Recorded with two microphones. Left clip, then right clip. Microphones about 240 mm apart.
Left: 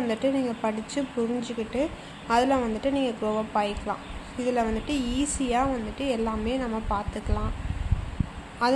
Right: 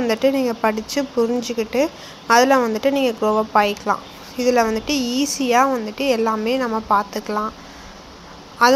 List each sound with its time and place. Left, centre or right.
0.1 s a woman's voice: centre
8.6 s a woman's voice: right